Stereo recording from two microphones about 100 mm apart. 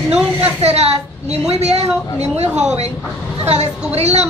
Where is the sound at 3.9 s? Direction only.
90° right.